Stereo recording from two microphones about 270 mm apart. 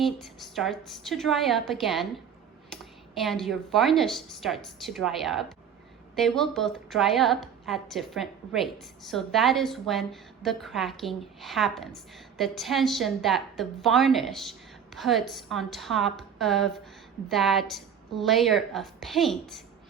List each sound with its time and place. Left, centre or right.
0.0 s a woman's voice: centre